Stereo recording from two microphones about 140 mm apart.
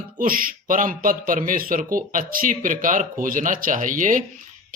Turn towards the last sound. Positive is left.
turn(degrees=-65)  # may be behind; listen again after turning